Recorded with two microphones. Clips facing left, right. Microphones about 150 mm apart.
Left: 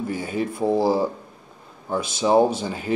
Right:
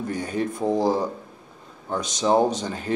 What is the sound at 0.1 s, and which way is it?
Speech, 5° left (ahead or behind).